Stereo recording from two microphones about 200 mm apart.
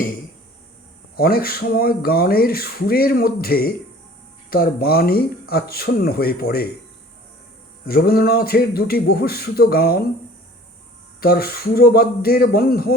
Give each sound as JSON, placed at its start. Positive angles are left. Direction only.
{"t": 1.1, "sound": "speech", "side_deg": 50}
{"t": 7.9, "sound": "speech", "side_deg": 50}
{"t": 11.2, "sound": "speech", "side_deg": 50}